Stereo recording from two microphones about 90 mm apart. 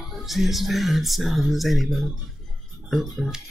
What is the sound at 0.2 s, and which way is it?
Speech, centre (ahead or behind).